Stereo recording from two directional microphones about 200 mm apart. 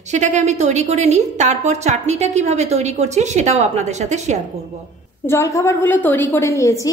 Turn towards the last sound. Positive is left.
turn(degrees=15)  # may be behind; listen again after turning